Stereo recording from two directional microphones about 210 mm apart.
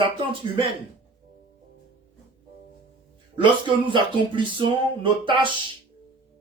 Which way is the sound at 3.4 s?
25° right (ahead or behind).